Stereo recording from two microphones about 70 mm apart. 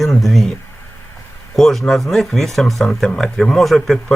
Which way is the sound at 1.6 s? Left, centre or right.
Centre.